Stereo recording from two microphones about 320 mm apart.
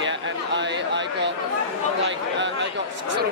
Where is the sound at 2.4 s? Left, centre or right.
Right.